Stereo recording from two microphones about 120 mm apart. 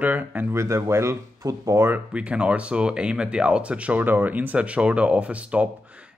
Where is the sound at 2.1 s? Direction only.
10° right (ahead or behind).